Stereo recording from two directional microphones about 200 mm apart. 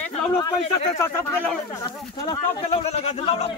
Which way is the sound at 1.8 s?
20° left (ahead or behind).